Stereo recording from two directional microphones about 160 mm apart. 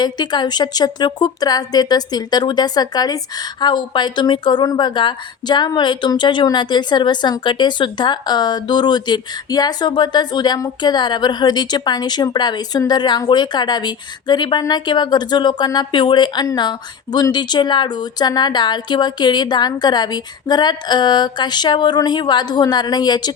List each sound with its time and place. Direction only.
0.0 s a woman's voice: 25° left (ahead or behind)